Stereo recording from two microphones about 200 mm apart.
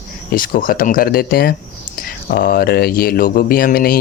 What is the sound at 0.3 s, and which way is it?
Speech, 45° left (ahead or behind).